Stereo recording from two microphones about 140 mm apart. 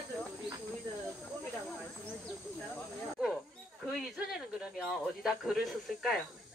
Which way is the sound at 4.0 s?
5° right (ahead or behind).